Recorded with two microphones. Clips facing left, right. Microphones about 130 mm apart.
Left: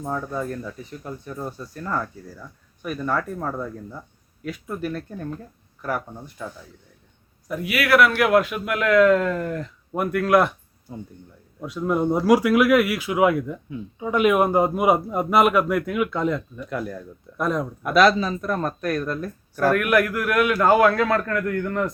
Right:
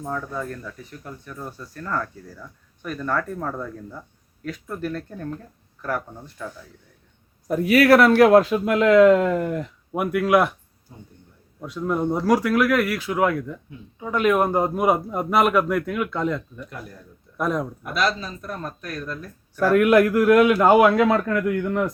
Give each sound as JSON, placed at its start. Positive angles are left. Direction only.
{"t": 0.0, "sound": "speech", "side_deg": 15}
{"t": 7.4, "sound": "speech", "side_deg": -40}
{"t": 11.6, "sound": "a man's voice", "side_deg": 5}
{"t": 16.6, "sound": "speech", "side_deg": 90}
{"t": 17.3, "sound": "a man's voice", "side_deg": 0}
{"t": 17.8, "sound": "speech", "side_deg": 70}
{"t": 19.7, "sound": "a man's voice", "side_deg": -25}